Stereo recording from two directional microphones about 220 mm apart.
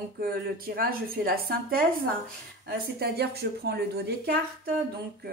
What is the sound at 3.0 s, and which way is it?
Speech, 45° right (ahead or behind).